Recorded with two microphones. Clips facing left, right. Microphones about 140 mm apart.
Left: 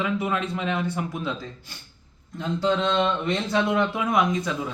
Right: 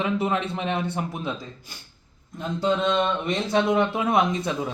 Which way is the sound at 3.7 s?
25° right (ahead or behind).